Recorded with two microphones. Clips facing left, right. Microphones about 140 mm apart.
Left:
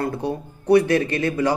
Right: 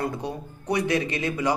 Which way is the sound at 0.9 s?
55° left (ahead or behind).